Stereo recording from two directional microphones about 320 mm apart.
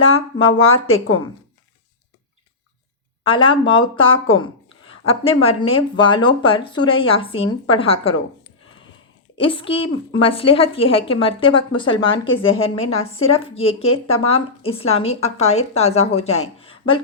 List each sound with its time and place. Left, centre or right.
0.1 s a woman's voice: centre
3.2 s a woman's voice: centre
9.4 s a woman's voice: centre